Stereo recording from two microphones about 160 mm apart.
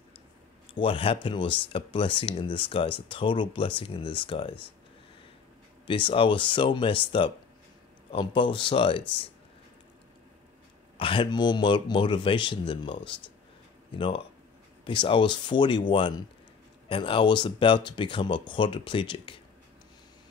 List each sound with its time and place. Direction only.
0.7 s speech: 35° left (ahead or behind)
5.9 s speech: 35° left (ahead or behind)
11.0 s speech: 35° left (ahead or behind)